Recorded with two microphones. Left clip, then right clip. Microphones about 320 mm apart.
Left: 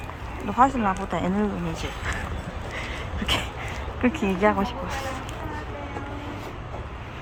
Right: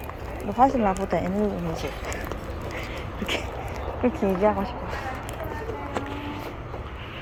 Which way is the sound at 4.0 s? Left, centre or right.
Centre.